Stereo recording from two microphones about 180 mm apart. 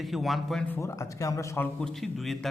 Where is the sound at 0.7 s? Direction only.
15° left (ahead or behind).